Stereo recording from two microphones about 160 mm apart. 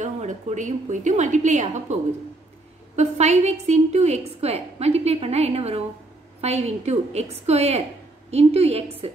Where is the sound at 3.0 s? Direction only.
45° right (ahead or behind).